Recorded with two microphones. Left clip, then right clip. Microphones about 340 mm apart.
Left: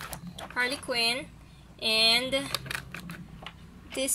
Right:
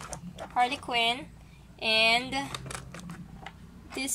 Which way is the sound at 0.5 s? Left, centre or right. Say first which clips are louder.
Right 2 dB; centre.